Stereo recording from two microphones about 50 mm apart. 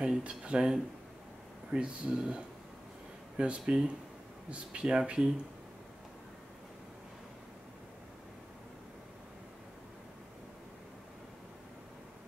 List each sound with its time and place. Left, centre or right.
0.0 s speech: centre